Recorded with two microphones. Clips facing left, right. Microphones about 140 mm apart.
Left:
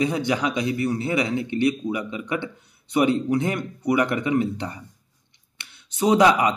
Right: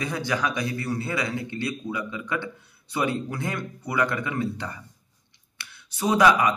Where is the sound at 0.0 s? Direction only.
20° left (ahead or behind).